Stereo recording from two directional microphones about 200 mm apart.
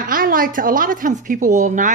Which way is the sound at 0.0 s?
45° right (ahead or behind).